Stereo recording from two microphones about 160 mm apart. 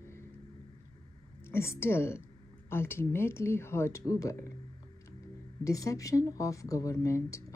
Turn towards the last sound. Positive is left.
turn(degrees=20)  # may be behind; listen again after turning